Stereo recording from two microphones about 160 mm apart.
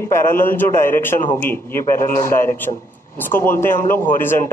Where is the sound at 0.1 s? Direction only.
15° left (ahead or behind).